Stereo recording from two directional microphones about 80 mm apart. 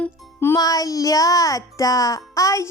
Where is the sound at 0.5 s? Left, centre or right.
Left.